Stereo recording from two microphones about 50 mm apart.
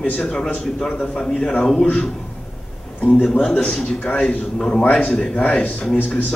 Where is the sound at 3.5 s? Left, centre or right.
Left.